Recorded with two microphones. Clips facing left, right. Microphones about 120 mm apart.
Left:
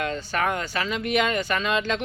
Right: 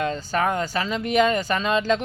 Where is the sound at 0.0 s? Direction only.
30° right (ahead or behind).